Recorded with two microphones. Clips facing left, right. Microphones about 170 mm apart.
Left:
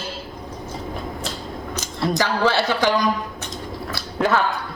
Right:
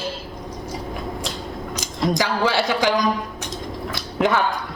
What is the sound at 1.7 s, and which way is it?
Speech, 15° right (ahead or behind).